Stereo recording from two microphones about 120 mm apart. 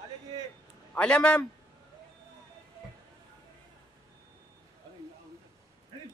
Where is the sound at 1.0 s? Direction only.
10° left (ahead or behind).